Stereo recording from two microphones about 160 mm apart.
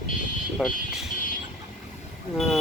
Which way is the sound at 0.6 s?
5° right (ahead or behind).